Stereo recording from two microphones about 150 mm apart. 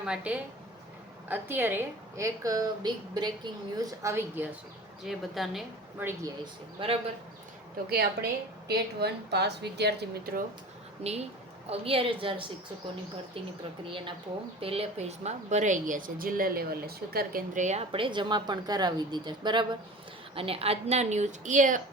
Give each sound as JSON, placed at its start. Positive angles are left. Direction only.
{"t": 0.0, "sound": "a woman's voice", "side_deg": -5}
{"t": 5.0, "sound": "a woman's voice", "side_deg": 0}
{"t": 6.4, "sound": "a woman's voice", "side_deg": -35}
{"t": 7.9, "sound": "a woman's voice", "side_deg": -90}
{"t": 11.0, "sound": "a woman's voice", "side_deg": -45}
{"t": 14.6, "sound": "a woman's voice", "side_deg": -40}
{"t": 17.9, "sound": "a woman's voice", "side_deg": -35}